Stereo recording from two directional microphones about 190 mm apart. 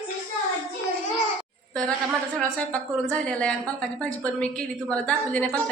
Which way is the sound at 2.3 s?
5° left (ahead or behind).